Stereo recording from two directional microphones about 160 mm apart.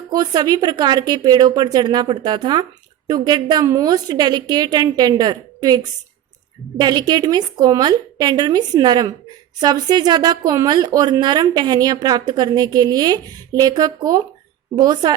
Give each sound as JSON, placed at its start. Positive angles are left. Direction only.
{"t": 0.1, "sound": "speech", "side_deg": -25}